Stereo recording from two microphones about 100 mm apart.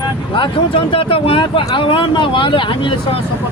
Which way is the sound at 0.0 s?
55° left (ahead or behind).